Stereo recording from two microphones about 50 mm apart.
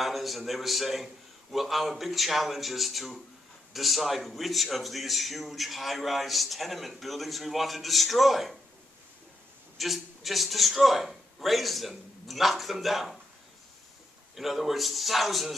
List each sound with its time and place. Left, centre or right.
0.0 s a man's voice: centre
9.8 s a man's voice: centre
14.3 s a man's voice: centre